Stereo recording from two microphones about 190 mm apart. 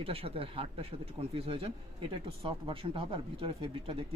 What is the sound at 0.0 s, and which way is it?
Speech, 30° right (ahead or behind).